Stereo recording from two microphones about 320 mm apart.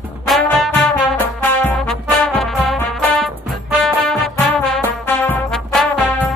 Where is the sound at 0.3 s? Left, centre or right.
Centre.